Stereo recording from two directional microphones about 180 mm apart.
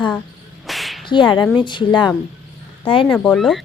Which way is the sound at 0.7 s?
Centre (ahead or behind).